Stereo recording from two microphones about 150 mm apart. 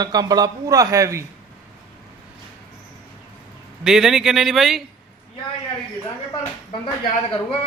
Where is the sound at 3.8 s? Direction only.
5° right (ahead or behind).